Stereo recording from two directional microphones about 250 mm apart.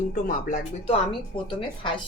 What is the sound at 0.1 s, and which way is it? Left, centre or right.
Speech, left.